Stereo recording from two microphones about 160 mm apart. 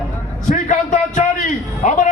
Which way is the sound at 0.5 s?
50° left (ahead or behind).